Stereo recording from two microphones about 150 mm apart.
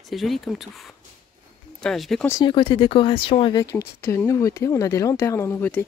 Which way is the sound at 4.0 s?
15° left (ahead or behind).